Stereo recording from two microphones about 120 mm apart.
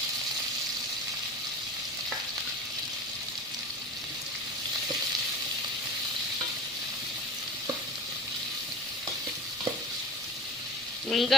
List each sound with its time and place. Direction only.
11.1 s speech: centre (ahead or behind)